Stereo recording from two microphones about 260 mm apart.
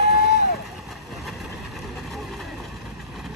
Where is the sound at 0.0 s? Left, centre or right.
Left.